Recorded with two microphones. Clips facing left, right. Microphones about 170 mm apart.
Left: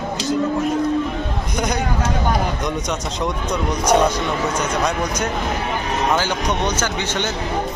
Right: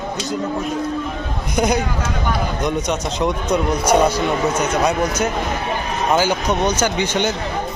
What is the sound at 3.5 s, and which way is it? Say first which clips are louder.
Speech: right 1 dB; 5° right (ahead or behind).